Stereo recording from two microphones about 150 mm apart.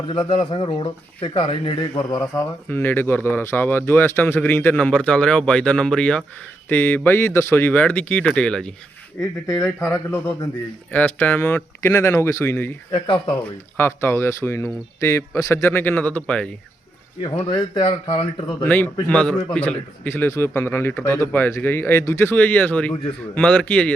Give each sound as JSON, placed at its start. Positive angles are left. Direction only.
{"t": 0.1, "sound": "speech", "side_deg": 35}
{"t": 2.6, "sound": "a man's voice", "side_deg": 15}
{"t": 9.7, "sound": "a man's voice", "side_deg": 15}
{"t": 12.9, "sound": "speech", "side_deg": 35}
{"t": 13.7, "sound": "a man's voice", "side_deg": 15}
{"t": 17.5, "sound": "speech", "side_deg": 40}
{"t": 18.6, "sound": "a man's voice", "side_deg": 10}